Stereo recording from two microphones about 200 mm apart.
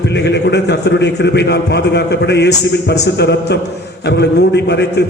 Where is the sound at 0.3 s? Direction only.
55° left (ahead or behind).